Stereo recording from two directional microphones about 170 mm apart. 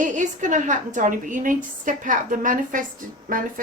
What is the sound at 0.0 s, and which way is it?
A woman's voice, 45° right (ahead or behind).